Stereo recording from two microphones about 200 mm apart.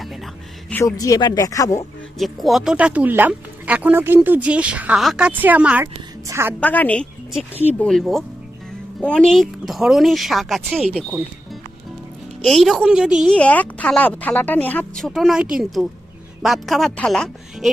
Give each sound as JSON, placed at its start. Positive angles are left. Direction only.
{"t": 0.0, "sound": "music", "side_deg": 0}
{"t": 0.7, "sound": "speech", "side_deg": 15}
{"t": 2.1, "sound": "speech", "side_deg": 0}
{"t": 6.6, "sound": "a woman's voice", "side_deg": 5}
{"t": 12.5, "sound": "a woman's voice", "side_deg": 0}